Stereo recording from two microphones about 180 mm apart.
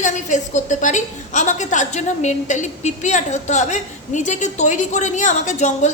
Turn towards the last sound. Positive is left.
turn(degrees=40)  # may be behind; listen again after turning